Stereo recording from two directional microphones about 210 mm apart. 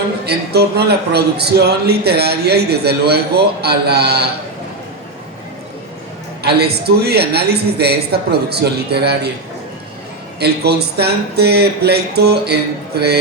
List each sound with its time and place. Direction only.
0.3 s a man's voice: 50° right (ahead or behind)
6.4 s a man's voice: 50° right (ahead or behind)
10.4 s a man's voice: 50° right (ahead or behind)